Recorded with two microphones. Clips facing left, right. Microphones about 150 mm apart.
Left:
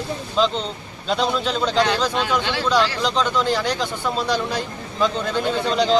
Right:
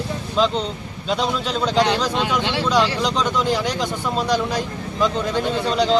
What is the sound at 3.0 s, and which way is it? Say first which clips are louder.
A man's voice: even; 10° right (ahead or behind).